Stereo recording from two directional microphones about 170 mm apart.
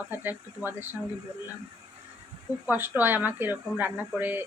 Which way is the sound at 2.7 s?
10° right (ahead or behind).